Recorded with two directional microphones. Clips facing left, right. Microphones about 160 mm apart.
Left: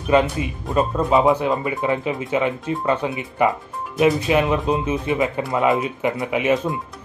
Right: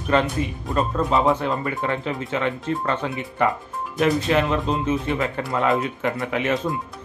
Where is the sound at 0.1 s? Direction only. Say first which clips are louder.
Left 3 dB; 10° left (ahead or behind).